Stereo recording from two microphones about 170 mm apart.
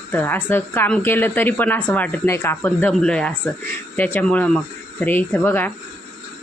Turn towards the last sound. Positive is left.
turn(degrees=10)  # may be behind; listen again after turning